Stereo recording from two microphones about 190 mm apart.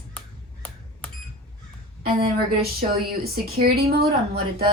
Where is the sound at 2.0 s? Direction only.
55° right (ahead or behind).